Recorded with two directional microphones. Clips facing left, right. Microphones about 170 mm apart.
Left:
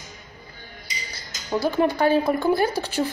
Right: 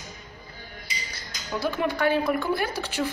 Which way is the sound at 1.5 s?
30° left (ahead or behind).